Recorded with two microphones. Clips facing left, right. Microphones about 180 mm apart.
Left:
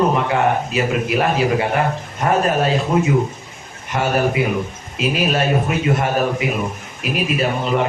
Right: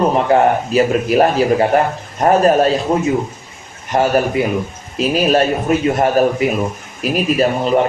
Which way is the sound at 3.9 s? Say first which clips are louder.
Right 4 dB; 40° right (ahead or behind).